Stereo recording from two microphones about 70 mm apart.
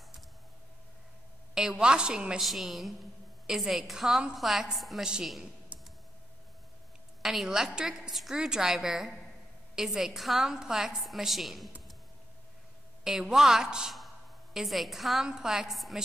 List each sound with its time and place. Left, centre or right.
1.5 s a woman's voice: centre
2.4 s a woman's voice: centre
5.7 s a sound: right
7.2 s a woman's voice: centre
13.0 s a woman's voice: centre
13.9 s a sound: centre
15.2 s a woman's voice: centre